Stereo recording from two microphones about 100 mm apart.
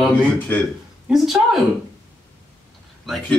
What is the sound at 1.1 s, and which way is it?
Speech, centre (ahead or behind).